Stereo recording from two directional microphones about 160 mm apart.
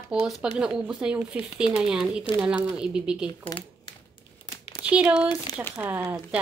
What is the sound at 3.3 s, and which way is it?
Speech, 30° left (ahead or behind).